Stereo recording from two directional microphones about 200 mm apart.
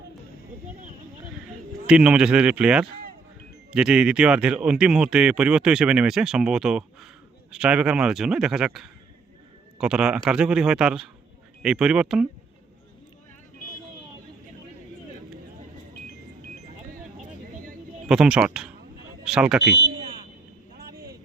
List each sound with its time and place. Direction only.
1.9 s speech: 5° right (ahead or behind)
18.1 s speech: 5° right (ahead or behind)
19.6 s speech: 55° right (ahead or behind)